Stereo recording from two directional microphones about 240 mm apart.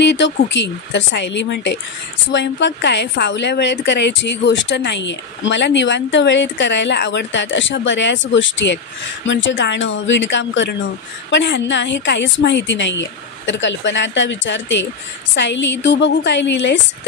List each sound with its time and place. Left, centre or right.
0.0 s a woman's voice: left